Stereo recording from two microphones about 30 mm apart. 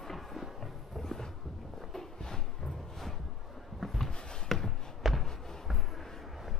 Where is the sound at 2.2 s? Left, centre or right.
Centre.